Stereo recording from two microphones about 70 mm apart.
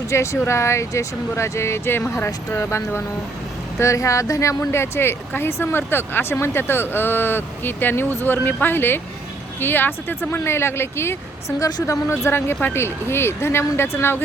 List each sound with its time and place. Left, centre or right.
0.1 s speech: left
2.2 s speech: left